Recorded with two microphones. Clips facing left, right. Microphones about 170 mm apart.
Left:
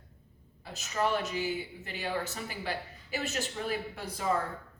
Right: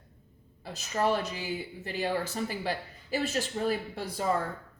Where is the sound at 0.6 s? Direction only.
35° right (ahead or behind).